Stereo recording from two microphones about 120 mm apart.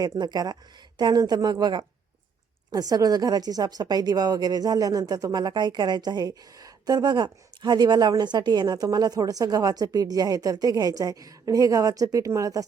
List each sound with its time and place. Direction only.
0.0 s a woman's voice: 35° right (ahead or behind)